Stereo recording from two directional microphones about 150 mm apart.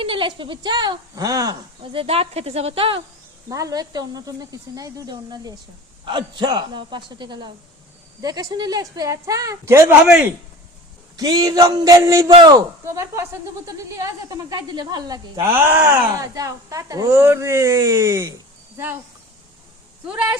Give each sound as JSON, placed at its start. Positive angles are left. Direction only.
{"t": 0.0, "sound": "speech", "side_deg": -35}
{"t": 3.5, "sound": "a woman's voice", "side_deg": -25}
{"t": 11.2, "sound": "a woman's voice", "side_deg": -25}
{"t": 20.1, "sound": "a woman's voice", "side_deg": -10}